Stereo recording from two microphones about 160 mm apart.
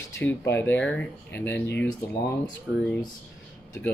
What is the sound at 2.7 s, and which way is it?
Speech, 5° left (ahead or behind).